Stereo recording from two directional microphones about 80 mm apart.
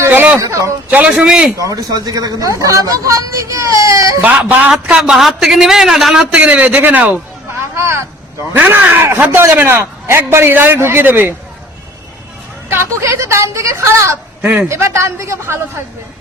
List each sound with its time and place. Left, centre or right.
0.1 s a sound: right
0.3 s a woman's voice: right
0.9 s a man's voice: centre
1.7 s speech: right
4.2 s a man's voice: centre
4.7 s a man's voice: centre
6.3 s speech: centre
7.8 s a woman's voice: right
8.5 s a man's voice: right
12.6 s a woman's voice: right
14.4 s speech: centre
14.7 s a woman's voice: right